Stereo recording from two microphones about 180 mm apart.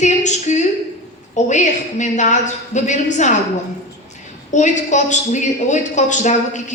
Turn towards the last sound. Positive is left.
turn(degrees=40)  # may be behind; listen again after turning